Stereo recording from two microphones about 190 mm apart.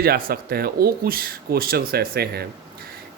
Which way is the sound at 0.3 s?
55° right (ahead or behind).